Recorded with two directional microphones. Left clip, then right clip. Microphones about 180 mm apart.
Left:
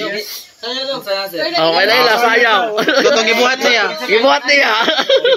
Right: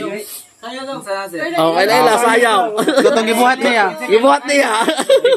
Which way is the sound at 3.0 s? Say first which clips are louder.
Even; 70° right (ahead or behind).